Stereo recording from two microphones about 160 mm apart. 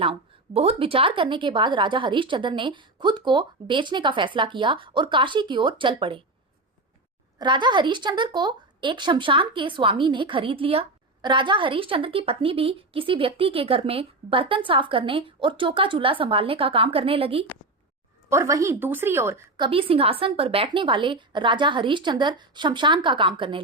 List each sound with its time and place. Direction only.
0.0 s speech: 35° right (ahead or behind)
7.3 s speech: 30° right (ahead or behind)
18.3 s a woman's voice: 20° right (ahead or behind)
19.5 s speech: 30° right (ahead or behind)